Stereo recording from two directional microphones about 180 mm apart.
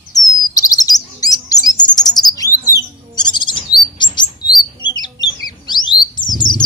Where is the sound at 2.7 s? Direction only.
25° left (ahead or behind).